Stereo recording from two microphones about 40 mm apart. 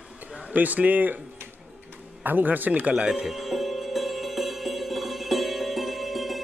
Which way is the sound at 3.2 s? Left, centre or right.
Centre.